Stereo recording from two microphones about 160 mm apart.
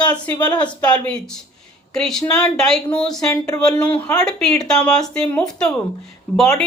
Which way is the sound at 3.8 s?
10° left (ahead or behind).